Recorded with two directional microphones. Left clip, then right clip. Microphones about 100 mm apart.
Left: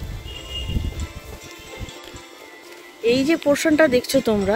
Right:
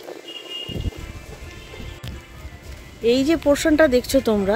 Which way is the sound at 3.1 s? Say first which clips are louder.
Right 1 dB; 15° left (ahead or behind).